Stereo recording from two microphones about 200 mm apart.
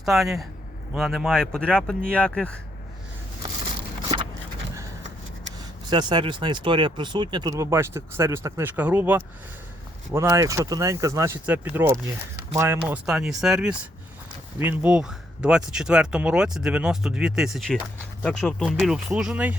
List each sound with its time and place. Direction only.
0.0 s speech: centre (ahead or behind)
5.5 s speech: 20° right (ahead or behind); by 19.5 s 5° right (ahead or behind)